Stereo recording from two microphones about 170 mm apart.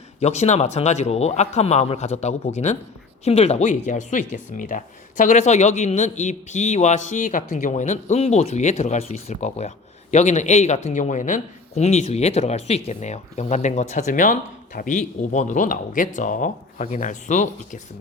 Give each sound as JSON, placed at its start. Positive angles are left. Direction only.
{"t": 0.2, "sound": "speech", "side_deg": 40}